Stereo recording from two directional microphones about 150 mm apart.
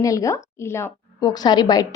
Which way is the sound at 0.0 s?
20° left (ahead or behind).